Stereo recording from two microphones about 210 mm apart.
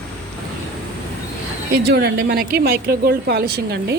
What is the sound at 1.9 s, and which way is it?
Speech, 50° right (ahead or behind).